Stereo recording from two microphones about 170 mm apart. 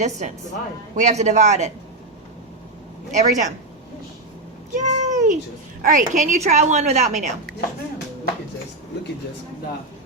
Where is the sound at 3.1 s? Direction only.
45° right (ahead or behind).